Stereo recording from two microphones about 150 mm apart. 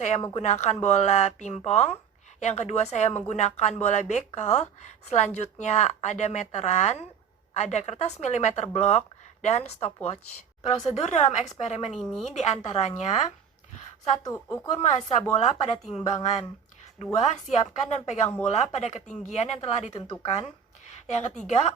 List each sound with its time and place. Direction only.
0.2 s speech: 45° left (ahead or behind)
11.9 s a woman's voice: 5° left (ahead or behind)
12.3 s a woman's voice: 50° left (ahead or behind)
14.3 s speech: 20° left (ahead or behind)
14.7 s speech: 50° left (ahead or behind)
17.2 s speech: 50° left (ahead or behind)